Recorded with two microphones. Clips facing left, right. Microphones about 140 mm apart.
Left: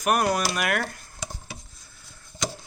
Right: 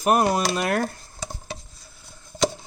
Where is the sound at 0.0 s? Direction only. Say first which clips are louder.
Right 3 dB; 25° right (ahead or behind).